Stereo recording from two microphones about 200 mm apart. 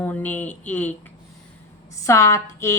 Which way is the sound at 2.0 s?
15° left (ahead or behind).